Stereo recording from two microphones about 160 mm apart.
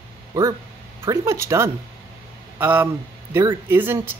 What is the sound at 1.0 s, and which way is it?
Speech, 20° right (ahead or behind).